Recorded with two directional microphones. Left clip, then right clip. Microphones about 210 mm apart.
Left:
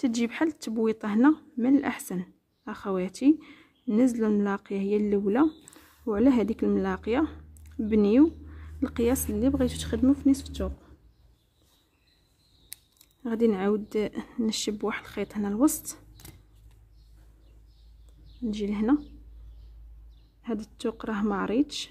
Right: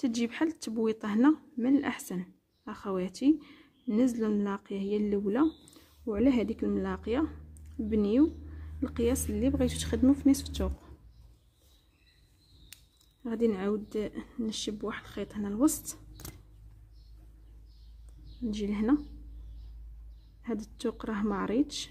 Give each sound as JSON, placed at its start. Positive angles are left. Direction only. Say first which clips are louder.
{"t": 0.0, "sound": "speech", "louder": "left 4 dB", "side_deg": 15}
{"t": 13.2, "sound": "speech", "louder": "left 4 dB", "side_deg": 20}
{"t": 18.4, "sound": "speech", "louder": "left 3 dB", "side_deg": 10}
{"t": 20.4, "sound": "speech", "louder": "left 3 dB", "side_deg": 10}